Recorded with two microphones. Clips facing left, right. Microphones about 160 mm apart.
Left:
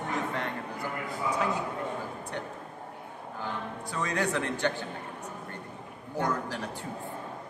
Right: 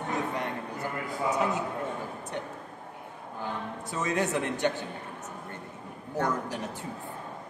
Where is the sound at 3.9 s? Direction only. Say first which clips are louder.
Right 2 dB; 20° right (ahead or behind).